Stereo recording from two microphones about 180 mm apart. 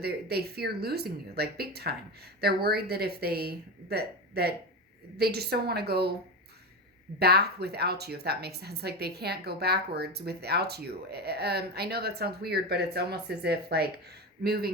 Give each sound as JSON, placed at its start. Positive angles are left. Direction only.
{"t": 0.0, "sound": "a woman's voice", "side_deg": -60}
{"t": 7.2, "sound": "a woman's voice", "side_deg": -60}